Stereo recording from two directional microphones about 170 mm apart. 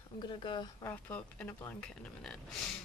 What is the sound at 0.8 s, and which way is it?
Speech, 10° left (ahead or behind).